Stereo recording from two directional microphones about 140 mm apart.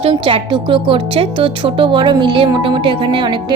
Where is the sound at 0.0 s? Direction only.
40° right (ahead or behind).